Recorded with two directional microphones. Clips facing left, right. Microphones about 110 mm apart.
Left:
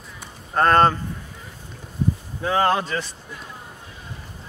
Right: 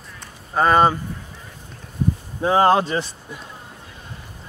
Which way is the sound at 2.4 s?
25° right (ahead or behind).